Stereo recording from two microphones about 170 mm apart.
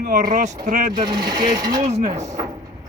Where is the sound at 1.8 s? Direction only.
40° right (ahead or behind).